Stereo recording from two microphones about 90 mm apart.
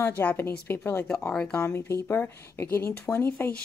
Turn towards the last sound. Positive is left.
turn(degrees=20)  # may be behind; listen again after turning